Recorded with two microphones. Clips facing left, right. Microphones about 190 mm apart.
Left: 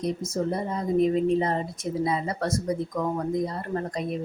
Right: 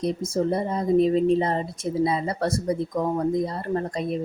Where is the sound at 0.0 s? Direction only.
30° right (ahead or behind).